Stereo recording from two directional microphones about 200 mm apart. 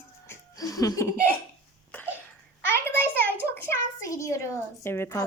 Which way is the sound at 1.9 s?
10° left (ahead or behind).